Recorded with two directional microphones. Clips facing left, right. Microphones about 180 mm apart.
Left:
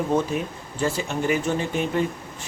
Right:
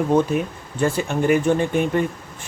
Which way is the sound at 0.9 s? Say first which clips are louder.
Right 8 dB; 55° right (ahead or behind).